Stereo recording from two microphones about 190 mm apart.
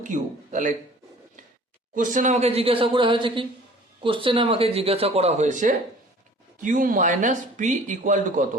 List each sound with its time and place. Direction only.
0.0 s speech: 40° right (ahead or behind)
2.0 s speech: 45° right (ahead or behind)